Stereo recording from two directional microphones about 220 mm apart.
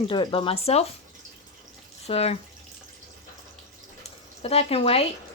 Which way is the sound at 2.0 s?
30° left (ahead or behind).